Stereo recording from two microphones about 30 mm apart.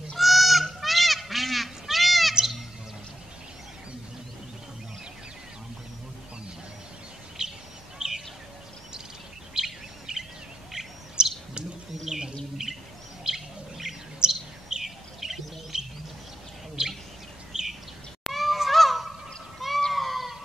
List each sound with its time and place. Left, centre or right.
0.2 s goose: centre
7.4 s bird: right
10.1 s bird: right
13.3 s chirp: centre
15.7 s bird: right
17.5 s bird: centre
18.2 s goose: centre
18.7 s fowl: centre
19.9 s goat: centre